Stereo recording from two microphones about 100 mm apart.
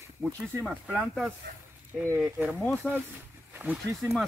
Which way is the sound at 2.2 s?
20° right (ahead or behind).